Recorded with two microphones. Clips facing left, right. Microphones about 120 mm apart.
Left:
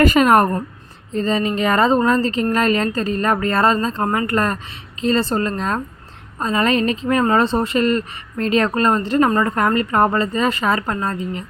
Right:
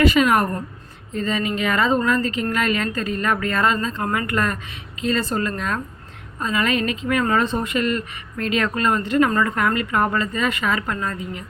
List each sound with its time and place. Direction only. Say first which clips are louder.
0.0 s a woman's voice: left 4 dB; 45° left (ahead or behind)
1.1 s a woman's voice: left 4 dB; 35° left (ahead or behind)